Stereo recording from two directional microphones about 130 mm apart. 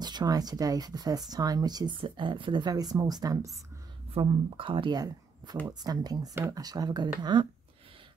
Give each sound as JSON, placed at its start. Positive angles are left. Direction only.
{"t": 0.0, "sound": "speech", "side_deg": -30}
{"t": 4.1, "sound": "speech", "side_deg": -40}